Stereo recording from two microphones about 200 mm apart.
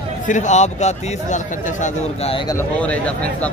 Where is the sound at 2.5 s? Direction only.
10° left (ahead or behind).